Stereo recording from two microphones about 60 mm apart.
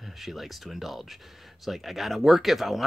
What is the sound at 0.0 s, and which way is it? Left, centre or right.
Speech, centre.